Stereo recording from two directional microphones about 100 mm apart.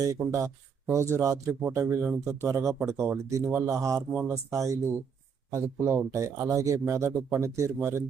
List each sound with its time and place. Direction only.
0.3 s speech: 30° right (ahead or behind)
4.1 s speech: 20° right (ahead or behind)
4.5 s speech: 30° right (ahead or behind)